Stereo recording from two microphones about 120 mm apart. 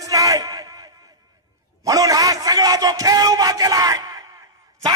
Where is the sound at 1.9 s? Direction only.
30° right (ahead or behind).